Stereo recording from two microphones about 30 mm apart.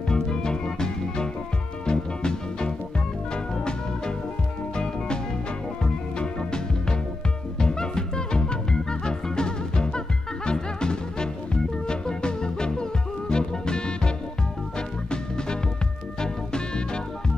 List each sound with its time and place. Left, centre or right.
0.1 s music: left
4.7 s music: left
16.2 s music: left